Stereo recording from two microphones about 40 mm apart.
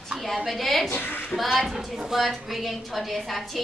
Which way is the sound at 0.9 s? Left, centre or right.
Left.